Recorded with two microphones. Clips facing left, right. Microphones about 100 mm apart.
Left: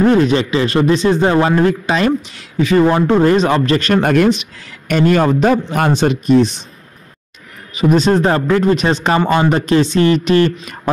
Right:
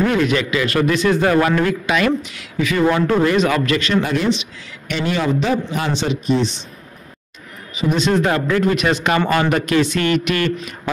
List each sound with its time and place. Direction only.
0.0 s speech: 35° left (ahead or behind)
3.9 s a man's voice: 55° left (ahead or behind)
7.7 s speech: 40° left (ahead or behind)